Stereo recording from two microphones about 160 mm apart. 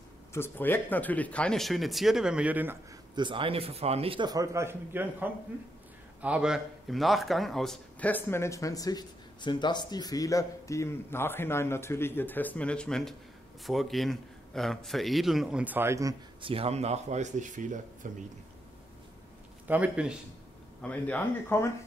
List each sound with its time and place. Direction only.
0.3 s a man's voice: 15° left (ahead or behind); by 2.8 s 10° right (ahead or behind)
3.2 s a man's voice: 30° right (ahead or behind)
16.4 s speech: 40° right (ahead or behind); by 18.2 s 55° right (ahead or behind)
19.7 s speech: 5° right (ahead or behind)
20.8 s a man's voice: 10° left (ahead or behind)